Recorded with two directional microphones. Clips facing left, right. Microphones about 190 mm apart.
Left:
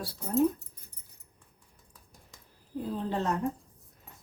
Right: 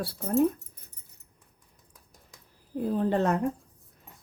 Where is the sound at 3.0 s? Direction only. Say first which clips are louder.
Right 6 dB; 60° right (ahead or behind).